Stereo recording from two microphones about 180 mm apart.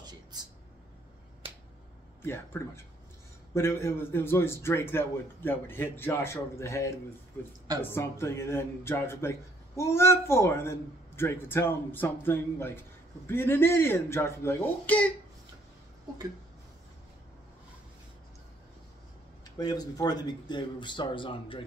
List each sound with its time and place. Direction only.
2.2 s speech: 15° left (ahead or behind)
19.6 s speech: 20° left (ahead or behind)